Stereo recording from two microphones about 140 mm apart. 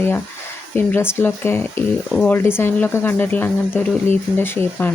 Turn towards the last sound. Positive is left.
turn(degrees=15)  # may be behind; listen again after turning